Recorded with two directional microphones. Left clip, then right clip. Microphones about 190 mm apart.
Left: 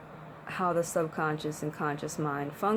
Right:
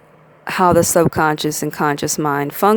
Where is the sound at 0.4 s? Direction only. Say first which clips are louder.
Right 16 dB; 60° right (ahead or behind).